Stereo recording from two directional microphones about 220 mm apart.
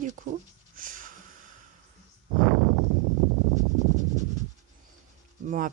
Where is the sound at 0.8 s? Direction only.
40° right (ahead or behind).